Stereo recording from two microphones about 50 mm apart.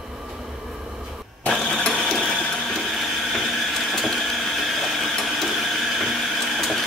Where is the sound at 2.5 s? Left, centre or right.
Centre.